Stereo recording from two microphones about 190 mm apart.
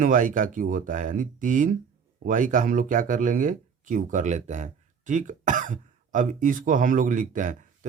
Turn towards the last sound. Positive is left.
turn(degrees=-45)  # may be behind; listen again after turning